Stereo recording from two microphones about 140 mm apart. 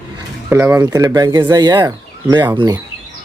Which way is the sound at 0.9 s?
25° right (ahead or behind).